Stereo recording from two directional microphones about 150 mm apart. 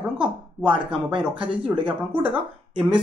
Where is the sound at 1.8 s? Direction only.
10° right (ahead or behind).